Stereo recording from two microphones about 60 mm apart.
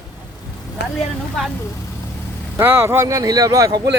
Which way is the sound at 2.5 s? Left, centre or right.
Right.